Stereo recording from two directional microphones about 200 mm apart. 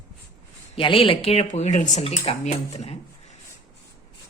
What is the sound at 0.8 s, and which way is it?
Speech, 25° left (ahead or behind).